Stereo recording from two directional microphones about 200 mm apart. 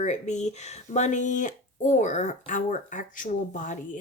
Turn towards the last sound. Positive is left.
turn(degrees=40)  # may be behind; listen again after turning